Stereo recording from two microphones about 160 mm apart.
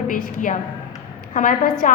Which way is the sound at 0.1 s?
60° left (ahead or behind).